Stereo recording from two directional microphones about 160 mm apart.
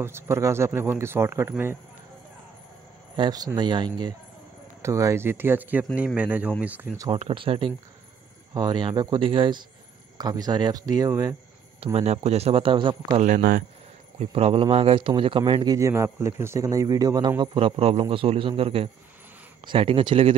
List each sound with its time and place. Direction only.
0.0 s speech: 15° right (ahead or behind)
3.2 s speech: 25° right (ahead or behind)
4.8 s speech: 20° right (ahead or behind)
7.1 s speech: 35° right (ahead or behind)
11.8 s speech: 40° right (ahead or behind)
13.2 s speech: 60° right (ahead or behind)
14.1 s speech: 40° right (ahead or behind)